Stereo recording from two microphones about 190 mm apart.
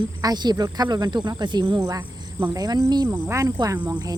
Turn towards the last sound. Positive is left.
turn(degrees=-20)  # may be behind; listen again after turning